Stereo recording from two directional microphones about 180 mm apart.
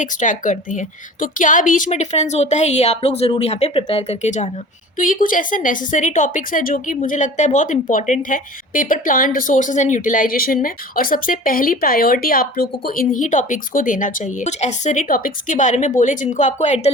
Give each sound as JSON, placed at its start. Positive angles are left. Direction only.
{"t": 0.0, "sound": "a woman's voice", "side_deg": 45}